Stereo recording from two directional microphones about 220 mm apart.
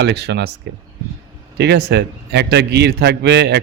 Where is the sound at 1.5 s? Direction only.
50° right (ahead or behind).